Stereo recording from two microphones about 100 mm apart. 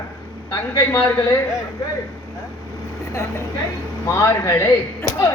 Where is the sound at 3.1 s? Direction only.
25° left (ahead or behind).